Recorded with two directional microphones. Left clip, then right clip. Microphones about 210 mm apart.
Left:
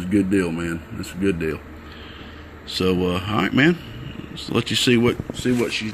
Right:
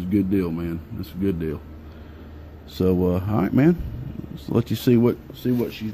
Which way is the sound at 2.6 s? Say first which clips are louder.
Left 1 dB; 20° right (ahead or behind).